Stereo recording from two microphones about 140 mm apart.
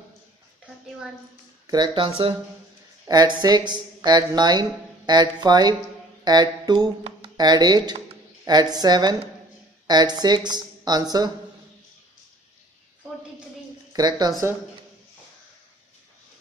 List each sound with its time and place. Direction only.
1.7 s speech: 30° right (ahead or behind)
3.1 s speech: 30° right (ahead or behind)
13.9 s speech: 30° right (ahead or behind)